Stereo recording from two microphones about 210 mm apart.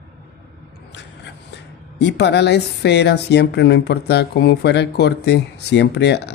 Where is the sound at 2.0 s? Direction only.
55° left (ahead or behind).